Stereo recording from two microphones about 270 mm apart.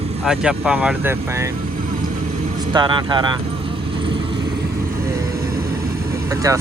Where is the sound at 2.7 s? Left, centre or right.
Centre.